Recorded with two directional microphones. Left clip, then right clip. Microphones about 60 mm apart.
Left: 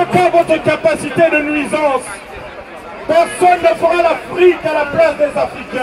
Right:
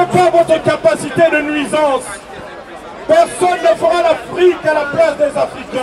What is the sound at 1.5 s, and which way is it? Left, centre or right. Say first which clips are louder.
Speech: right 1 dB; centre.